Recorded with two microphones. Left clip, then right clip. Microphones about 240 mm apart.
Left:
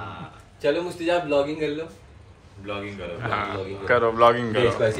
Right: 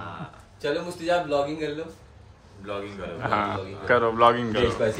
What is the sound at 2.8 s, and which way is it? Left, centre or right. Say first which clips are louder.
A man's voice: right 2 dB; centre.